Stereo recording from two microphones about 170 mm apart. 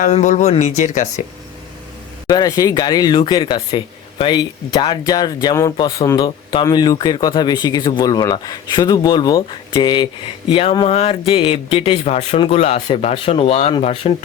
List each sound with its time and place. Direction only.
0.0 s speech: 45° left (ahead or behind)
2.2 s speech: 20° left (ahead or behind); by 14.3 s 40° left (ahead or behind)